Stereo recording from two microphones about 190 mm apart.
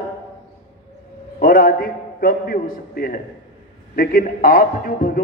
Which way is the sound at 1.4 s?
50° left (ahead or behind).